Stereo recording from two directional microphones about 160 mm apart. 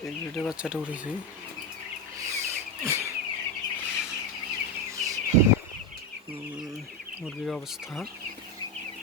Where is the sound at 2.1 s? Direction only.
15° right (ahead or behind).